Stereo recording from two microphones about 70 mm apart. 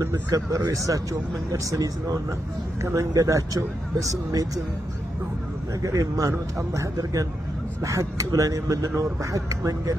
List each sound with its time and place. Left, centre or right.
0.1 s speech: right
5.8 s speech: right